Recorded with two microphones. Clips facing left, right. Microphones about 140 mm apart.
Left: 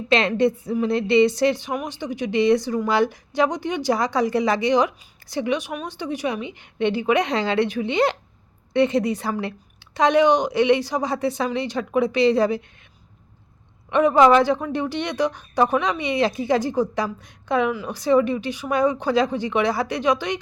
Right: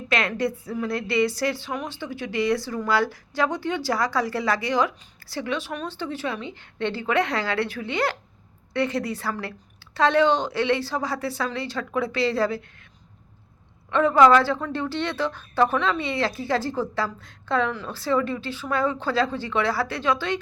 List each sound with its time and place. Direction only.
0.1 s a woman's voice: 25° left (ahead or behind)
13.9 s speech: 15° left (ahead or behind)